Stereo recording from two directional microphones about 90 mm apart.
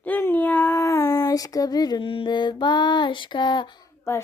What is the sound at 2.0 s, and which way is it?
Mantra, 70° left (ahead or behind).